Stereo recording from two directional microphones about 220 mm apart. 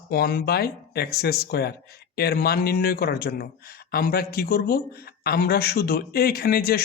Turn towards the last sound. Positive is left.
turn(degrees=45)  # may be behind; listen again after turning